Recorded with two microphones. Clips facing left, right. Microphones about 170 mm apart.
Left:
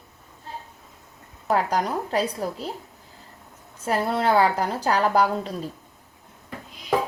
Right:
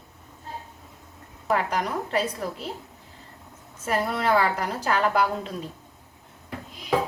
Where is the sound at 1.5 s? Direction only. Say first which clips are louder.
Left 2 dB; 35° left (ahead or behind).